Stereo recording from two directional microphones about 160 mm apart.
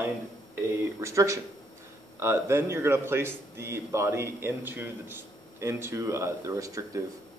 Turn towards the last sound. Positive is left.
turn(degrees=-20)  # may be behind; listen again after turning